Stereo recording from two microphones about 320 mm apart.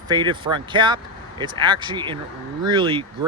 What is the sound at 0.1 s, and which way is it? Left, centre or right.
Speech, centre.